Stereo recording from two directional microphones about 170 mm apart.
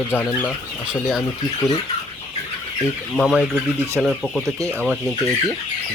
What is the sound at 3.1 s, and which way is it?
Speech, 5° right (ahead or behind).